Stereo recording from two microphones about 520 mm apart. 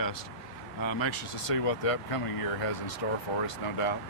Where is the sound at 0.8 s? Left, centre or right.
Left.